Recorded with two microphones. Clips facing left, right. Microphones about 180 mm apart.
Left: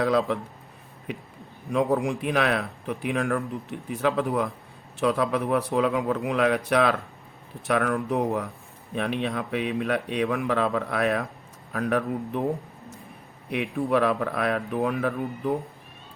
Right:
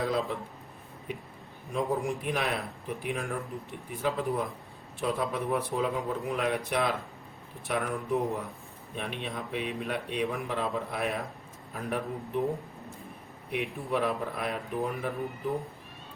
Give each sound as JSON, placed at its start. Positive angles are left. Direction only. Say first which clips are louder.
{"t": 0.0, "sound": "speech", "louder": "left 7 dB", "side_deg": 80}
{"t": 1.7, "sound": "speech", "louder": "left 6 dB", "side_deg": 75}
{"t": 13.5, "sound": "speech", "louder": "left 7 dB", "side_deg": 75}